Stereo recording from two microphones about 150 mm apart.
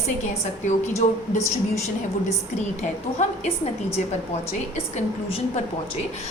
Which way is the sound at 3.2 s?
45° left (ahead or behind).